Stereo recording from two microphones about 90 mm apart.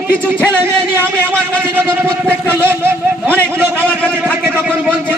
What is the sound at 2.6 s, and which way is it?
Vehicle, 25° right (ahead or behind).